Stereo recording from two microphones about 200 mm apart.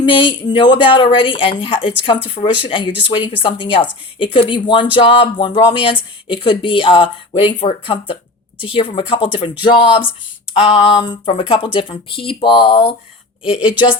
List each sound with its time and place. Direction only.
0.0 s speech: 25° left (ahead or behind)
13.4 s a woman's voice: 5° right (ahead or behind)